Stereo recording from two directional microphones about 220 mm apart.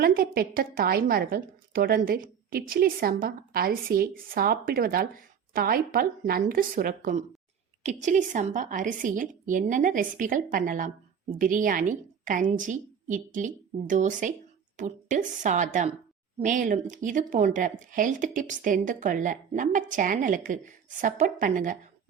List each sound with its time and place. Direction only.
0.0 s a woman's voice: 40° right (ahead or behind)